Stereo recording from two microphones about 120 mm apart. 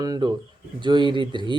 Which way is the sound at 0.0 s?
35° right (ahead or behind).